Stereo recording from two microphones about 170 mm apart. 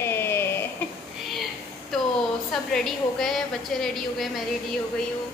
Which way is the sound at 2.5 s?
5° left (ahead or behind).